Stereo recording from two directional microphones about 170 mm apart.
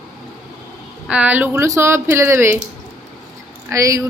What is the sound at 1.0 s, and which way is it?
Speech, 5° right (ahead or behind).